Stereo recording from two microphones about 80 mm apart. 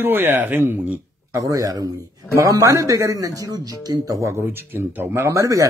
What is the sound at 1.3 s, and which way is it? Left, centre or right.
A man's voice, right.